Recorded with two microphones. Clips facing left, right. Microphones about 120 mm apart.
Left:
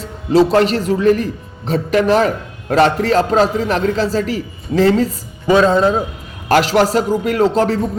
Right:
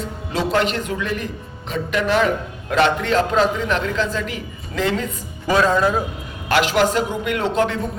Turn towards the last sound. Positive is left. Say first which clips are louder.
# left 6 dB
turn(degrees=35)  # may be behind; listen again after turning